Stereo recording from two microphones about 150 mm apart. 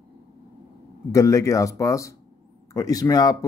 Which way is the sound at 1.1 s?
20° left (ahead or behind).